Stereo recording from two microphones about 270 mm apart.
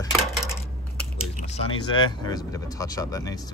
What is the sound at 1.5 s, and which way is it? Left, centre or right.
Speech, centre.